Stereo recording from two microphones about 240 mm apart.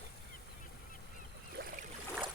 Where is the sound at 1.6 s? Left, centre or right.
Right.